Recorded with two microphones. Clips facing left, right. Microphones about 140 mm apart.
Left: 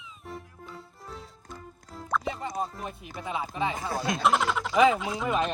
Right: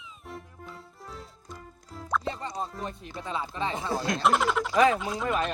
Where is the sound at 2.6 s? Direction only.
10° left (ahead or behind).